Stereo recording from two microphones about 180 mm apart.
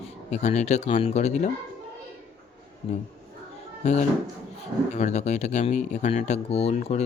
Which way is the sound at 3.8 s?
40° left (ahead or behind).